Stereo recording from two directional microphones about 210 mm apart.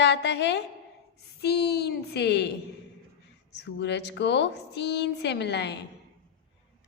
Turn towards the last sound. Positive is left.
turn(degrees=55)  # may be behind; listen again after turning